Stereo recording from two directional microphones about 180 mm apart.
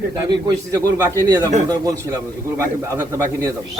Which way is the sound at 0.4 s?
20° right (ahead or behind).